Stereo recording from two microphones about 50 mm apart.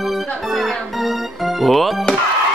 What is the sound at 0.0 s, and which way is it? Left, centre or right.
Music, centre.